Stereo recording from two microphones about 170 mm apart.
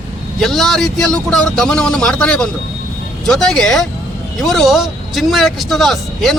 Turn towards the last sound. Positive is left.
turn(degrees=0)  # may be behind; listen again after turning